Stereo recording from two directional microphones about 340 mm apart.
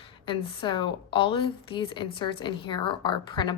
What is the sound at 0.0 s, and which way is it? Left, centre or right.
A woman's voice, centre.